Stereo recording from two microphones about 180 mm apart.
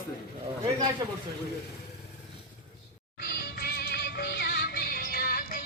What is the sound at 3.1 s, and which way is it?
Music, 60° left (ahead or behind).